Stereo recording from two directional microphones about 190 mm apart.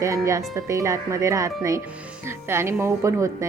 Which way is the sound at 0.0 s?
15° right (ahead or behind).